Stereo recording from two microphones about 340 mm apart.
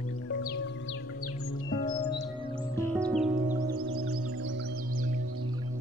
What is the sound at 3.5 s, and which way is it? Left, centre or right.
Music, right.